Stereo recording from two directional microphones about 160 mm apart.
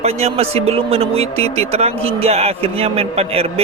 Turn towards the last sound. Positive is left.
turn(degrees=-40)  # may be behind; listen again after turning